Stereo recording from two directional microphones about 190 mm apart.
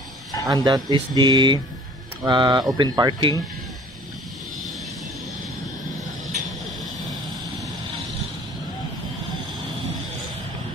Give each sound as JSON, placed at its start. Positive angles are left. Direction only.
{"t": 0.5, "sound": "speech", "side_deg": -20}